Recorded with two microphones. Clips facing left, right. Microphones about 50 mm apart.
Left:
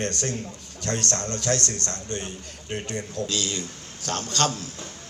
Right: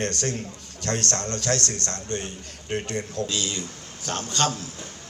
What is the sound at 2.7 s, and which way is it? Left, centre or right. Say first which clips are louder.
A man's voice: right 2 dB; right.